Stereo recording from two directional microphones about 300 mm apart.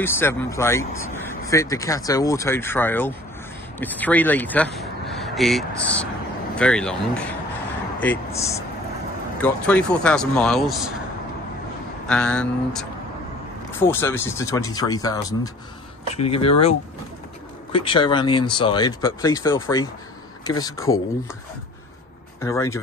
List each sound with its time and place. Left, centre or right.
0.0 s a man's voice: centre
12.1 s a man's voice: centre
17.7 s speech: centre
22.4 s speech: centre